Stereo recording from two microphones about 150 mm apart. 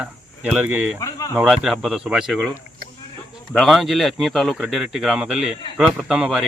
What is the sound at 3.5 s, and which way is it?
Speech, centre (ahead or behind).